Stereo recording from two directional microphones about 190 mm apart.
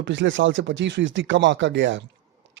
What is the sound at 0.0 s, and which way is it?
Speech, 75° right (ahead or behind).